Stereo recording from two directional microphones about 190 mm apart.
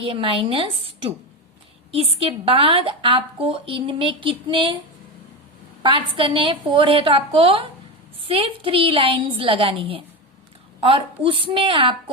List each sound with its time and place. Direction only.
0.0 s a woman's voice: 30° right (ahead or behind)
2.1 s a woman's voice: 30° right (ahead or behind)
5.8 s a woman's voice: 25° right (ahead or behind)